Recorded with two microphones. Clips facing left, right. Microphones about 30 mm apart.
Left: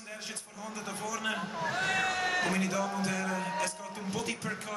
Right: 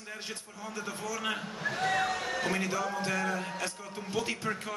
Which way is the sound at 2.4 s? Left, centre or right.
Centre.